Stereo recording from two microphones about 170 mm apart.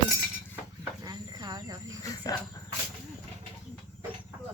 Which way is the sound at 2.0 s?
20° left (ahead or behind).